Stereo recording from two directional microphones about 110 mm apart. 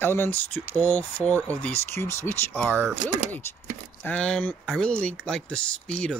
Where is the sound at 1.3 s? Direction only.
25° right (ahead or behind).